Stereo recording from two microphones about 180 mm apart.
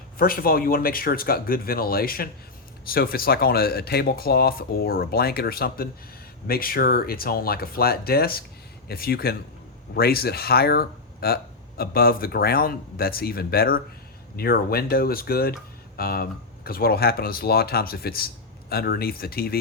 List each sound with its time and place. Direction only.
0.2 s speech: 55° left (ahead or behind)